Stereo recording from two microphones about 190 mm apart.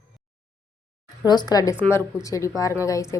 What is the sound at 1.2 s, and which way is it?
A woman's voice, 20° left (ahead or behind).